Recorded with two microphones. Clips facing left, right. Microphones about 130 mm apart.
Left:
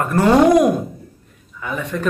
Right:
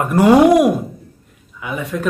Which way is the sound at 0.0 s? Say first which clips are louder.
Right 3 dB; 15° right (ahead or behind).